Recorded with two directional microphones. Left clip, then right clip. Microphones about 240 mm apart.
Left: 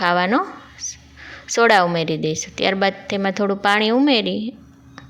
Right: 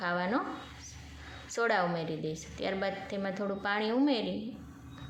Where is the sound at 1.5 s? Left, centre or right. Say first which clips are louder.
Left 15 dB; left.